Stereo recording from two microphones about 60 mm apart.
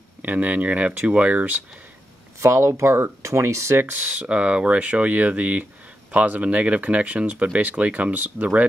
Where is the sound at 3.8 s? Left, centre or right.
Right.